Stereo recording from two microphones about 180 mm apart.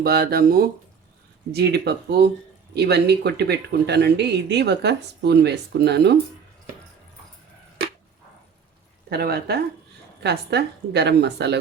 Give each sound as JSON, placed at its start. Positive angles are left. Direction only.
{"t": 0.0, "sound": "speech", "side_deg": -60}
{"t": 9.0, "sound": "speech", "side_deg": -60}